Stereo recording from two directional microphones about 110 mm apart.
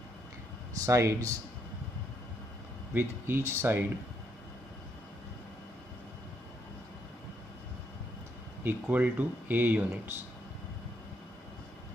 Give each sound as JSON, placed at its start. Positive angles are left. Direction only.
{"t": 0.7, "sound": "speech", "side_deg": -30}
{"t": 2.9, "sound": "speech", "side_deg": -20}
{"t": 8.6, "sound": "speech", "side_deg": -15}